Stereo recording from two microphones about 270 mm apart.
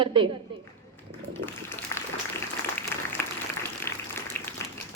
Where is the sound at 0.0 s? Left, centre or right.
Centre.